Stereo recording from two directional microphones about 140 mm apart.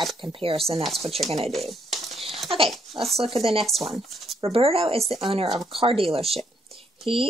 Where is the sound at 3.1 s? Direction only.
45° right (ahead or behind).